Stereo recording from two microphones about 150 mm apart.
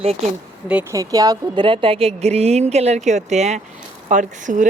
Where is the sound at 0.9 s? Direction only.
20° right (ahead or behind).